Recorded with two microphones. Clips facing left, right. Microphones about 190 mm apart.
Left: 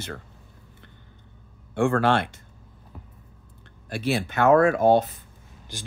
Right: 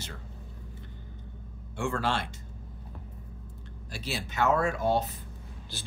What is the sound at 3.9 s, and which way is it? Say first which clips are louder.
Speech: left 11 dB; 60° left (ahead or behind).